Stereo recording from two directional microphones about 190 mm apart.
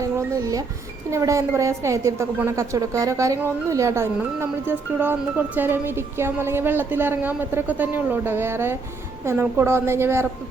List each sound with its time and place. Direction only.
0.0 s music: 15° right (ahead or behind)
1.1 s a woman's voice: 15° right (ahead or behind)